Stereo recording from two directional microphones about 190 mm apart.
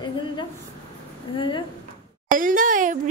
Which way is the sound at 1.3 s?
25° left (ahead or behind).